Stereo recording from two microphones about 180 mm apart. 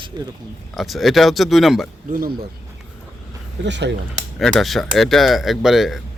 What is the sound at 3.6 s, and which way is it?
Speech, 75° right (ahead or behind).